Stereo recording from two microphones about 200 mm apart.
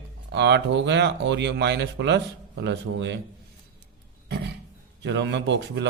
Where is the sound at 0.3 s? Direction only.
60° right (ahead or behind).